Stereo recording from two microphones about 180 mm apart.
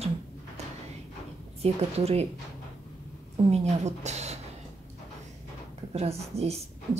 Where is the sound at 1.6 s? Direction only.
35° right (ahead or behind).